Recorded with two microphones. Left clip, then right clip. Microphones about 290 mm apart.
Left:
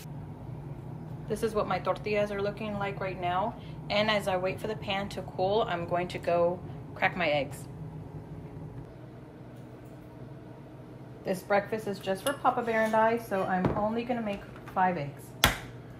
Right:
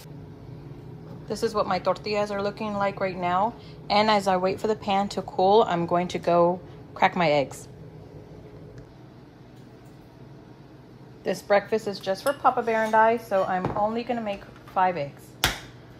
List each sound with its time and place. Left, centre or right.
1.3 s a woman's voice: centre
11.2 s a woman's voice: right